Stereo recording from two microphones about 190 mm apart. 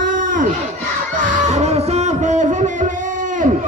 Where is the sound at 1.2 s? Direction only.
40° right (ahead or behind).